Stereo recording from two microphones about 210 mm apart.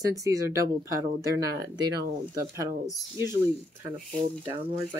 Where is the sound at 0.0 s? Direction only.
15° right (ahead or behind).